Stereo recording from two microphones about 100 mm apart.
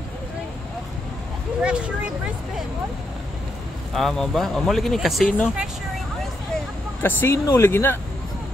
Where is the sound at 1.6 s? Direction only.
10° right (ahead or behind).